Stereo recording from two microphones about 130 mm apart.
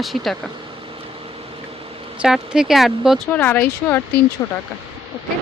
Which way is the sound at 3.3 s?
15° left (ahead or behind).